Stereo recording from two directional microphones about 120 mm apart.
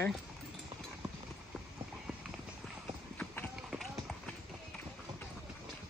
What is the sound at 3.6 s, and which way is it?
Run, centre (ahead or behind).